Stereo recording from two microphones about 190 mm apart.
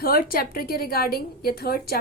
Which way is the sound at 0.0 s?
50° left (ahead or behind).